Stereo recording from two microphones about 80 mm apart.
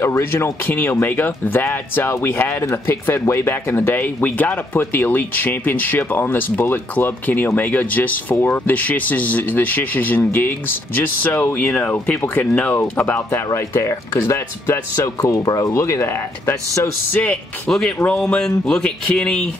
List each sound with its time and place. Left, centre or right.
0.0 s speech: left
13.6 s speech: left
17.1 s speech: centre
17.6 s speech: centre
17.9 s speech: centre